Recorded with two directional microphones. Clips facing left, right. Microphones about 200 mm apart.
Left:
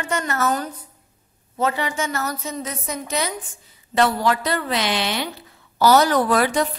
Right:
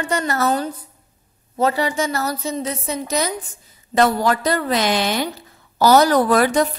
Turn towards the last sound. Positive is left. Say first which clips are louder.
# right 3 dB
turn(degrees=-45)  # may be behind; listen again after turning